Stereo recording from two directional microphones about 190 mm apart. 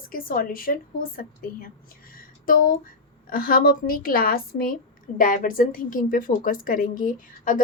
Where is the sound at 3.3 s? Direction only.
50° left (ahead or behind).